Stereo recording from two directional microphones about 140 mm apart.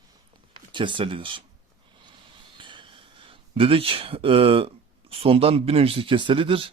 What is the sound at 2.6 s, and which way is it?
Speech, 35° right (ahead or behind).